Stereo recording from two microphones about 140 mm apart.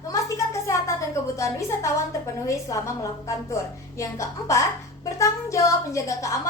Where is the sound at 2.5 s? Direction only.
20° left (ahead or behind).